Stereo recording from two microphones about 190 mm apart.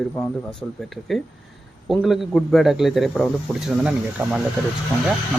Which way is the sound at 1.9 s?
Centre (ahead or behind).